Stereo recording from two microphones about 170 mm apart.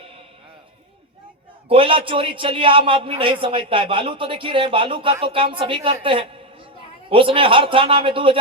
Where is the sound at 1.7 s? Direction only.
30° right (ahead or behind).